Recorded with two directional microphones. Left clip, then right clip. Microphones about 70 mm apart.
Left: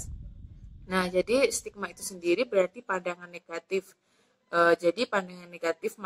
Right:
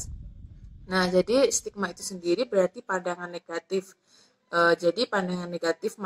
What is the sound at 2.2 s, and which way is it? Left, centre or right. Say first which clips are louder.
Speech: right 1 dB; right.